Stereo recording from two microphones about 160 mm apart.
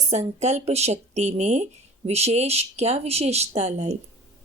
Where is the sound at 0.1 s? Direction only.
45° right (ahead or behind).